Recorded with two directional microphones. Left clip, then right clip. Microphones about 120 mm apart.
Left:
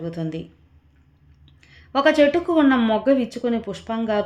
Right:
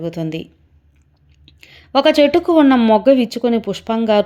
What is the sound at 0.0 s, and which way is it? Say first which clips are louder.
Speech: right 6 dB; 40° right (ahead or behind).